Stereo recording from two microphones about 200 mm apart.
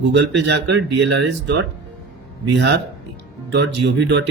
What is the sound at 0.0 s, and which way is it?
Speech, 60° right (ahead or behind).